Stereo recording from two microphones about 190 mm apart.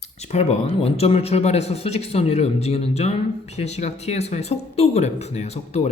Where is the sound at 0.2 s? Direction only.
35° left (ahead or behind).